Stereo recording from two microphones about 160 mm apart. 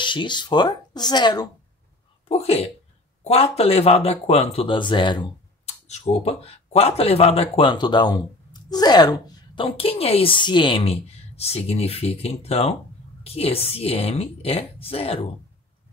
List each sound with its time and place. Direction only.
0.0 s speech: 30° left (ahead or behind)
2.2 s a woman's voice: 40° left (ahead or behind)
9.7 s a woman's voice: 35° left (ahead or behind)